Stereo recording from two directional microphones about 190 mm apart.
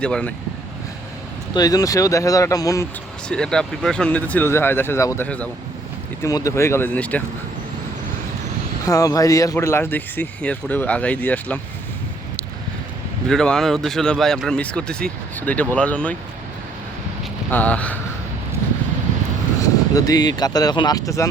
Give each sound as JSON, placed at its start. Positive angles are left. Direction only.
{"t": 0.0, "sound": "speech", "side_deg": 5}
{"t": 1.5, "sound": "speech", "side_deg": 20}
{"t": 3.2, "sound": "speech", "side_deg": 5}
{"t": 8.9, "sound": "speech", "side_deg": 15}
{"t": 13.2, "sound": "speech", "side_deg": 5}
{"t": 17.5, "sound": "speech", "side_deg": 10}
{"t": 19.9, "sound": "speech", "side_deg": 20}